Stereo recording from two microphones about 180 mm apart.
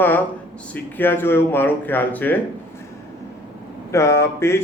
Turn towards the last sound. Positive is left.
turn(degrees=15)  # may be behind; listen again after turning